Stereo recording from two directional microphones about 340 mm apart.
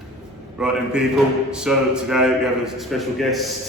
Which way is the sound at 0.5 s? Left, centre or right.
Centre.